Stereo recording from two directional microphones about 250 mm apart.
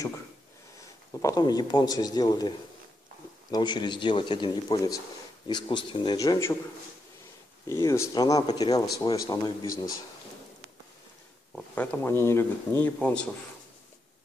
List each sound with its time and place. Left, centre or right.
1.2 s speech: centre
3.5 s speech: centre
7.6 s speech: centre
11.5 s speech: centre